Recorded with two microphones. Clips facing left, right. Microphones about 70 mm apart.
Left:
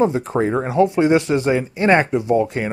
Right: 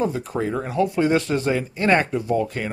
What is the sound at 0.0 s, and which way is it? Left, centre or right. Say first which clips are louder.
Speech: left 6 dB; left.